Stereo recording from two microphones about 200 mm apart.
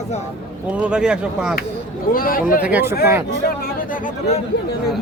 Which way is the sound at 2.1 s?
45° left (ahead or behind).